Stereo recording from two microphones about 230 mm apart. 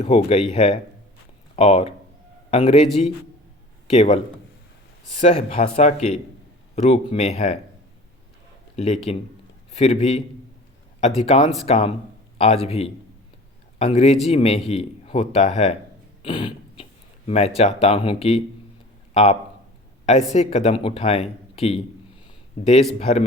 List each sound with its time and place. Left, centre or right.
0.0 s a man's voice: left
3.9 s a man's voice: left
8.7 s a man's voice: left
16.2 s a sound: left
17.2 s a man's voice: left
23.0 s a man's voice: left